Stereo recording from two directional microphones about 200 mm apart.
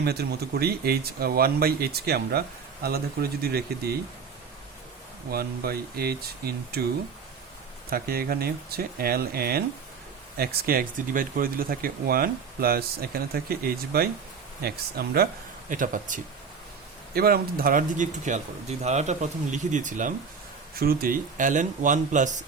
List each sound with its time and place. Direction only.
0.0 s speech: 55° right (ahead or behind)
5.3 s speech: 50° right (ahead or behind)
7.9 s speech: 50° right (ahead or behind)